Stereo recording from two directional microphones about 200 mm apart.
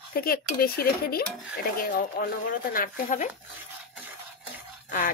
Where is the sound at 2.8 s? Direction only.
40° left (ahead or behind).